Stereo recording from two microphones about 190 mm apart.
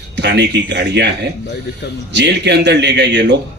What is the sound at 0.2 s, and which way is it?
Speech, 65° right (ahead or behind).